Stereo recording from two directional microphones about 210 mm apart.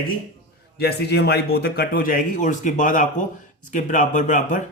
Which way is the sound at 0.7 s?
50° left (ahead or behind).